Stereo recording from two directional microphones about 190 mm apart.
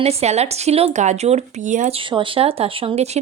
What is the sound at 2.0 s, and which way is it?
Speech, 25° right (ahead or behind).